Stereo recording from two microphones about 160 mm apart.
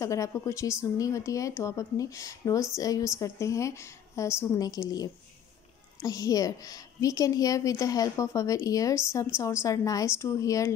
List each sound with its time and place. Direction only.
0.0 s a woman's voice: 20° left (ahead or behind)